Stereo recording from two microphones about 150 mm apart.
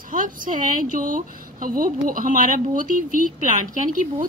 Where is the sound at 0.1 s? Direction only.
65° right (ahead or behind).